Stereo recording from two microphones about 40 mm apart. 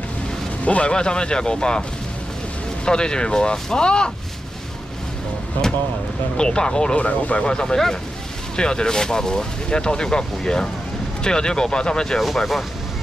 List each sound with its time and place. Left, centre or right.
0.7 s speech: left
0.9 s speech: left
6.3 s speech: left
7.0 s speech: left
7.4 s speech: centre